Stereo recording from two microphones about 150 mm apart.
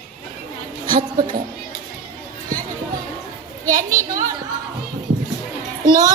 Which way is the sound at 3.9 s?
25° right (ahead or behind).